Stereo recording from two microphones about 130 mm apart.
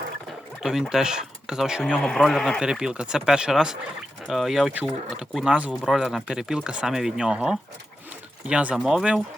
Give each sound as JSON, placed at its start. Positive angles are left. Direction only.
{"t": 0.6, "sound": "speech", "side_deg": -5}